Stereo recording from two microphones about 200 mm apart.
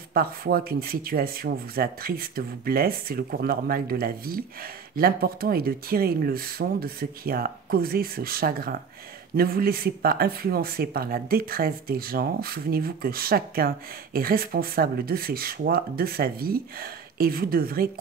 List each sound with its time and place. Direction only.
0.1 s speech: 50° right (ahead or behind)